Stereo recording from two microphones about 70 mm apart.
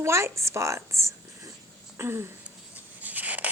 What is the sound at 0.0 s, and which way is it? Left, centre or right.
A woman's voice, right.